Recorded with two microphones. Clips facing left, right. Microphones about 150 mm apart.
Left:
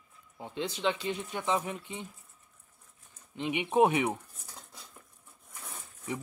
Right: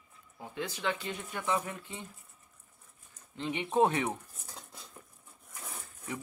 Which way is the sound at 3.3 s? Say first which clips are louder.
Left 2 dB; 15° left (ahead or behind).